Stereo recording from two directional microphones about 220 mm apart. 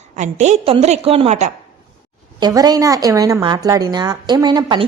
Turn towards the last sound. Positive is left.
turn(degrees=-20)  # may be behind; listen again after turning